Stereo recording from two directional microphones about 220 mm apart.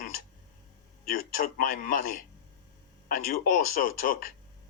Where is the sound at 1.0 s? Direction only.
40° left (ahead or behind).